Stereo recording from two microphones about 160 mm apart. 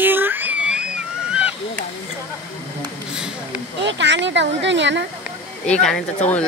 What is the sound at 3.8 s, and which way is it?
Speech, 90° right.